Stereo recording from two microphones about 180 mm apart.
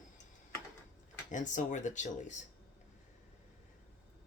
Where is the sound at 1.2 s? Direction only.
45° left (ahead or behind).